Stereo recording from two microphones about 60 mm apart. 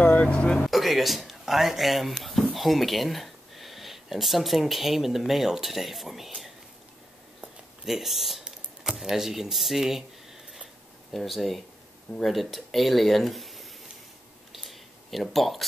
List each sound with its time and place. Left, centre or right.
0.0 s speech: centre
0.7 s speech: centre
7.8 s speech: centre
11.1 s speech: centre
14.5 s a sound: centre